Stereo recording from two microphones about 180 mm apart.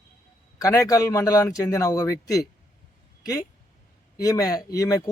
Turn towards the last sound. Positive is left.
turn(degrees=20)  # may be behind; listen again after turning